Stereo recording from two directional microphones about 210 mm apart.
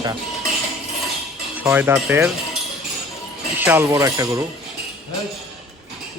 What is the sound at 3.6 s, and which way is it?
Speech, 10° right (ahead or behind).